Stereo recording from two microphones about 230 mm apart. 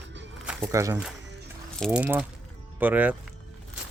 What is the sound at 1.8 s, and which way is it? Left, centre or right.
Speech, centre.